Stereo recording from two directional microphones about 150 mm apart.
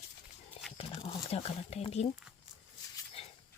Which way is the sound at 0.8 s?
40° left (ahead or behind).